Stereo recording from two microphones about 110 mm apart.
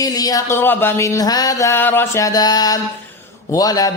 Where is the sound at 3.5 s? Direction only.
35° left (ahead or behind).